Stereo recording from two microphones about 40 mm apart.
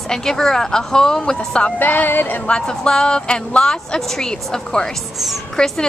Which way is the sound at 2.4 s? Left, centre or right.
Left.